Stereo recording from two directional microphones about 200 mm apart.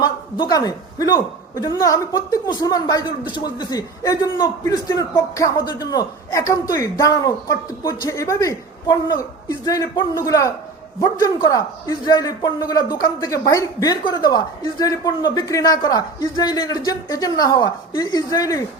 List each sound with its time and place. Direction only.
0.0 s a man's voice: 20° left (ahead or behind)